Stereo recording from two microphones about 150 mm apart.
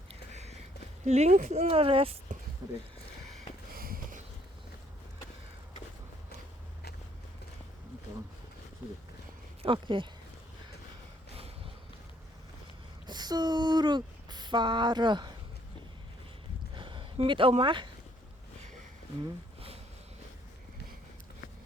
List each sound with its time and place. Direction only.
0.1 s a sound: 45° right (ahead or behind)
1.0 s speech: 50° right (ahead or behind)
3.7 s sniff: 80° right
9.6 s speech: 30° right (ahead or behind)
13.1 s speech: 25° right (ahead or behind)
16.7 s a sound: 35° right (ahead or behind)
17.6 s speech: 35° right (ahead or behind)